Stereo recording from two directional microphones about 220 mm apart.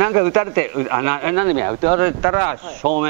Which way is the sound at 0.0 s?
15° right (ahead or behind).